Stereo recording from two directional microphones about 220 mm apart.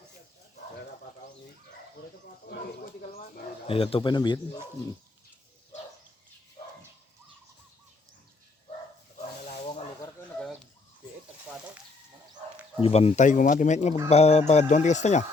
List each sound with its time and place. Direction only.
2.5 s speech: 40° left (ahead or behind)
3.7 s speech: 25° left (ahead or behind)
9.5 s snake: 25° left (ahead or behind)
12.8 s speech: 25° left (ahead or behind)